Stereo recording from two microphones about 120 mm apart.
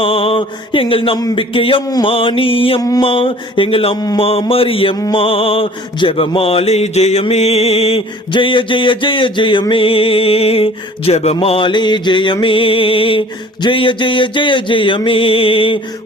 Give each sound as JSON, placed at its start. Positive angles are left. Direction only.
{"t": 0.0, "sound": "mantra", "side_deg": 50}
{"t": 3.9, "sound": "a sound", "side_deg": 30}
{"t": 4.2, "sound": "mantra", "side_deg": 55}
{"t": 11.3, "sound": "mantra", "side_deg": 50}